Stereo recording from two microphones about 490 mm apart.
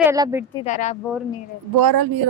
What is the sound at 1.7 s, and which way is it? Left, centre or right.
Speech, right.